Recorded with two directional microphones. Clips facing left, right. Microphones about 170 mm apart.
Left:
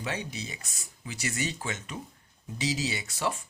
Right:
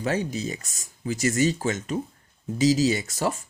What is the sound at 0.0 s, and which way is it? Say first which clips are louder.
Speech: right 9 dB; 45° right (ahead or behind).